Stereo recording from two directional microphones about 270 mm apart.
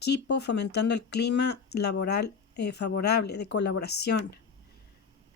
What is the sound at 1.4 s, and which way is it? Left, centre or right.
Speech, left.